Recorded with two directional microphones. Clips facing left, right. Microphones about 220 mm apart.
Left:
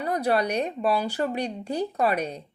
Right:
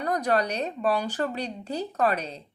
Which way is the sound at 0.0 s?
10° left (ahead or behind).